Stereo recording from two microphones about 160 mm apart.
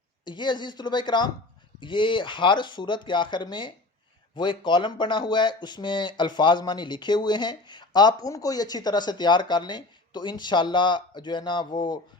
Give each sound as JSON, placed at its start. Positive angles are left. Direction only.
{"t": 0.3, "sound": "speech", "side_deg": 30}